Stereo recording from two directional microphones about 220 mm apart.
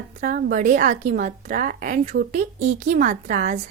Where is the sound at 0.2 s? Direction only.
40° right (ahead or behind).